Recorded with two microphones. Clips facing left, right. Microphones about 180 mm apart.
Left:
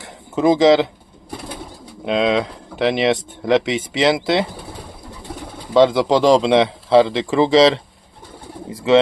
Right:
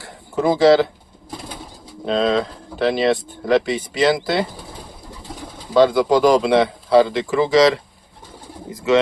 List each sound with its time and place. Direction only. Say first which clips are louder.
0.0 s a sound: left 3 dB; 20° left (ahead or behind)
2.0 s speech: left 1 dB; 15° left (ahead or behind)
5.7 s speech: left 1 dB; 20° left (ahead or behind)
8.7 s bird: left 2 dB; 30° left (ahead or behind)